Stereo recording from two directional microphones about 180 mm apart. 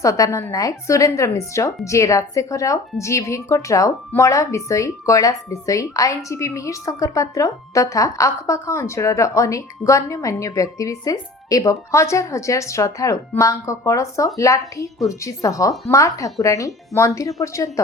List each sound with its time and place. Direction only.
0.0 s a woman's voice: 20° left (ahead or behind)